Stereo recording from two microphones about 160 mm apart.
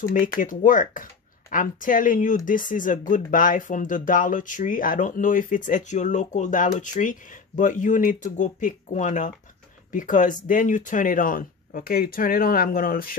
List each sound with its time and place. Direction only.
0.4 s speech: 55° left (ahead or behind)